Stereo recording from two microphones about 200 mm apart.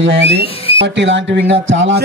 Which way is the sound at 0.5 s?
30° left (ahead or behind).